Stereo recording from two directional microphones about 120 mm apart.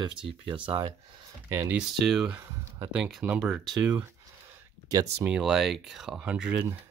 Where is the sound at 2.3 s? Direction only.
20° right (ahead or behind).